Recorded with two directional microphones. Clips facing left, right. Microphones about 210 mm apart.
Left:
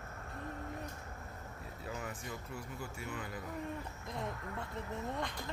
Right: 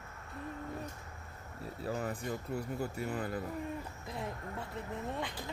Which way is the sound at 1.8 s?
35° right (ahead or behind).